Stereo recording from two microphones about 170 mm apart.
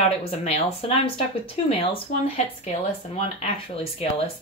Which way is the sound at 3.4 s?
35° left (ahead or behind).